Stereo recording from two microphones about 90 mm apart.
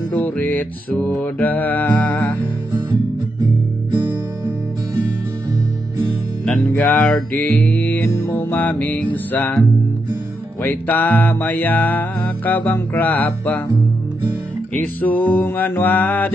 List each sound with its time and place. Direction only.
0.1 s music: 20° left (ahead or behind)
6.8 s music: 15° left (ahead or behind)
7.3 s mantra: 15° left (ahead or behind)
8.0 s music: 25° left (ahead or behind)
14.7 s music: 20° left (ahead or behind)